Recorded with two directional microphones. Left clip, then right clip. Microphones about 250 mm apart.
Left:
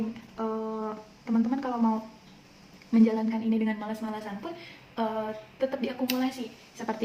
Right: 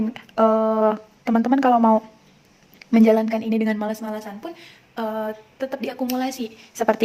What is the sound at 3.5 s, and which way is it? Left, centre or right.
Speech, right.